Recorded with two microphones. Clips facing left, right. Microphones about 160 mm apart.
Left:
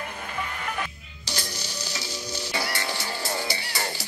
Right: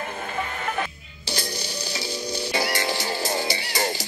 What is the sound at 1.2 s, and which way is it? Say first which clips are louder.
Music: right 4 dB; 15° right (ahead or behind).